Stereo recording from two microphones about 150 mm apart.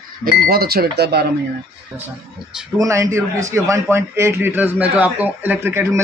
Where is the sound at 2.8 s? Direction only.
20° right (ahead or behind).